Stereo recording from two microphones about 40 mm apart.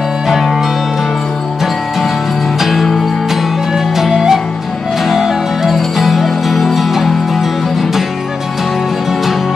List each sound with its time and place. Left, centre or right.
2.6 s music: centre